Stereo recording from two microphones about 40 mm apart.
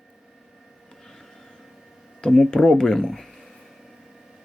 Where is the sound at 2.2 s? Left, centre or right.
Centre.